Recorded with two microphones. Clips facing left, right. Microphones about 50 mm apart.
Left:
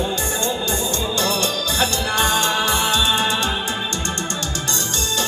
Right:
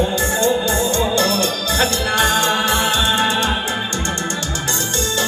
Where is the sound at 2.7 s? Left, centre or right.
Right.